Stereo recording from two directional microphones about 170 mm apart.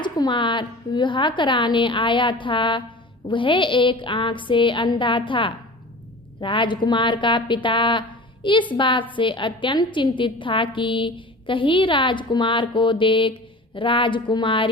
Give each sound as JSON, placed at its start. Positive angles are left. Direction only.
{"t": 0.0, "sound": "a woman's voice", "side_deg": 25}